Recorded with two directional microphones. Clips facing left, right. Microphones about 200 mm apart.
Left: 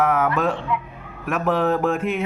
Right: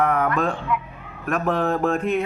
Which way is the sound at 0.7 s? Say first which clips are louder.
Even; 30° left (ahead or behind).